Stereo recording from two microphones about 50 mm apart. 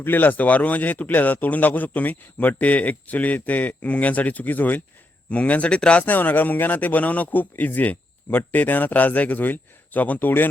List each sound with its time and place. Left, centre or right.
0.0 s a man's voice: left
6.1 s a man's voice: left